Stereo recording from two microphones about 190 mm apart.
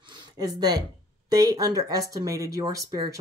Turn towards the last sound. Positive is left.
turn(degrees=-20)  # may be behind; listen again after turning